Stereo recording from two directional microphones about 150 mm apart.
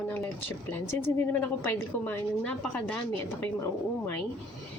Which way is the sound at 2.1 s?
10° left (ahead or behind).